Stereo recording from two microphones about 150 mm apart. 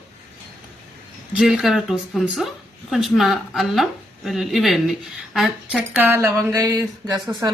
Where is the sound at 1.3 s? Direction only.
5° right (ahead or behind).